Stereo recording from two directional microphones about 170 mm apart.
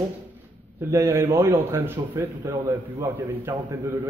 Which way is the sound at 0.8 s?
15° right (ahead or behind).